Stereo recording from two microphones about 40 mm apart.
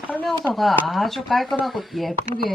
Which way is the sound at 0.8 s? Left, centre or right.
Centre.